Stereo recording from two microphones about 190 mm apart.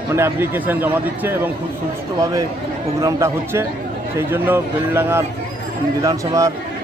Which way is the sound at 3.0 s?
15° right (ahead or behind).